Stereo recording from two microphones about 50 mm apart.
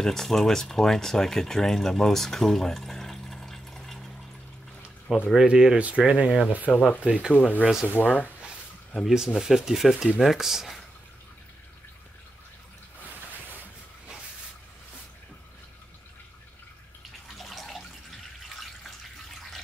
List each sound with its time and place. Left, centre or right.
0.0 s speech: centre
5.1 s speech: centre
5.8 s speech: right
6.7 s speech: centre
7.0 s speech: centre
7.3 s speech: left
9.0 s speech: centre
17.4 s water: centre